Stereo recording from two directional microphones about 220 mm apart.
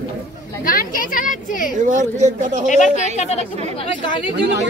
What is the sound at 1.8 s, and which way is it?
Speech, 35° right (ahead or behind).